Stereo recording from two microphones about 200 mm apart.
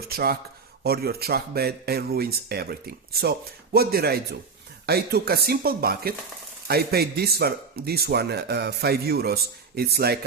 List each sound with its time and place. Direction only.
0.0 s speech: 50° right (ahead or behind)